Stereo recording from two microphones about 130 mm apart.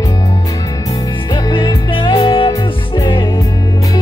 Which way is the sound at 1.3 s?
35° left (ahead or behind).